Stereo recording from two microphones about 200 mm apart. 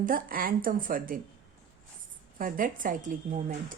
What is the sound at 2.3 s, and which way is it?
Speech, 40° right (ahead or behind).